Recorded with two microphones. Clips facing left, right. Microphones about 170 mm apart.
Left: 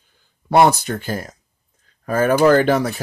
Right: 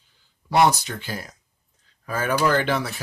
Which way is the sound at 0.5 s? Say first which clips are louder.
Left 5 dB; 50° left (ahead or behind).